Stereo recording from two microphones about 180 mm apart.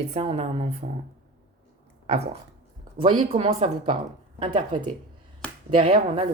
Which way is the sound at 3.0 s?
30° right (ahead or behind).